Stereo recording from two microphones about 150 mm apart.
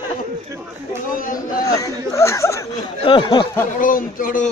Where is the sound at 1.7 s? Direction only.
20° left (ahead or behind).